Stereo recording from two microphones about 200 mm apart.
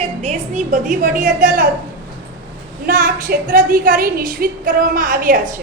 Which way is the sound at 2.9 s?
45° right (ahead or behind).